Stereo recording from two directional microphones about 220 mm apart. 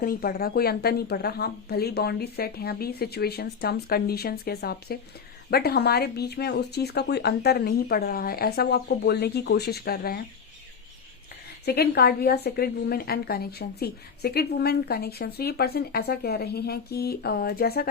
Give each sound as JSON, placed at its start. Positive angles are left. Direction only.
{"t": 0.0, "sound": "a woman's voice", "side_deg": 40}
{"t": 11.6, "sound": "a woman's voice", "side_deg": 45}